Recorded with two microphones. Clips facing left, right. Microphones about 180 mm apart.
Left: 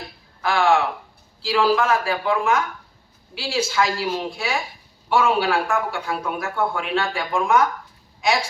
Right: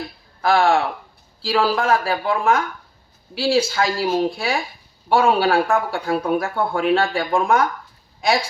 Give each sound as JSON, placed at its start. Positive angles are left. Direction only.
{"t": 0.4, "sound": "speech", "side_deg": -35}